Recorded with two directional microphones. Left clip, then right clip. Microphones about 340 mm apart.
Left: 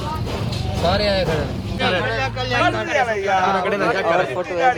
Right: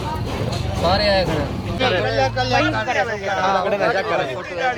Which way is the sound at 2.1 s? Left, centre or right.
Centre.